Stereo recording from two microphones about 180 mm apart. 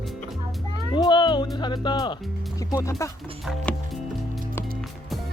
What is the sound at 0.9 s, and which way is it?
Music, 25° left (ahead or behind).